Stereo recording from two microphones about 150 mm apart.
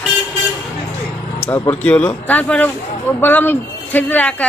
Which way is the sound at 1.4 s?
15° left (ahead or behind).